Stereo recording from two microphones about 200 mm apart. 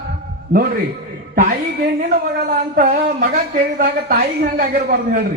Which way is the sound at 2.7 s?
40° right (ahead or behind).